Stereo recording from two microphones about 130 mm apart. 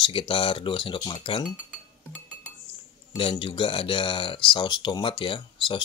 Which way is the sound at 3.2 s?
40° left (ahead or behind).